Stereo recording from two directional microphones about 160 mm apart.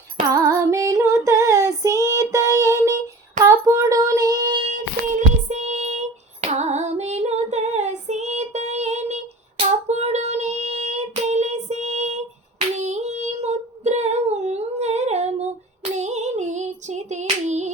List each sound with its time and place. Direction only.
0.3 s female singing: 20° right (ahead or behind)
3.7 s child singing: 20° right (ahead or behind)
5.5 s female singing: 45° right (ahead or behind)
15.8 s a sound: 45° right (ahead or behind)